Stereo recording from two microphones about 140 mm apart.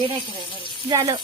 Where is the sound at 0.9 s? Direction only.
30° right (ahead or behind).